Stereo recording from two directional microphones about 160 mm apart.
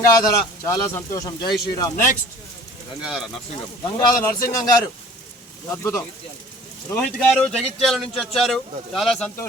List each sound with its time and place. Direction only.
0.0 s speech: 25° left (ahead or behind)
3.0 s speech: 5° right (ahead or behind)
4.2 s speech: 20° left (ahead or behind)
6.9 s speech: 5° left (ahead or behind)